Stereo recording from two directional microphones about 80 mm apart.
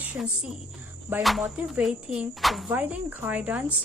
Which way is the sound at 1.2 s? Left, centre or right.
Centre.